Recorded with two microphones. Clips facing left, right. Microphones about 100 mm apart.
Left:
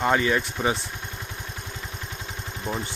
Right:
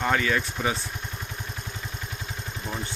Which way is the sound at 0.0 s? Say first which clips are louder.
Left 3 dB; 20° left (ahead or behind).